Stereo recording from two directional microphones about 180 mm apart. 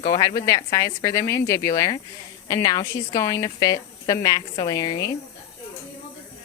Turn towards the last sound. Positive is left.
turn(degrees=20)  # may be behind; listen again after turning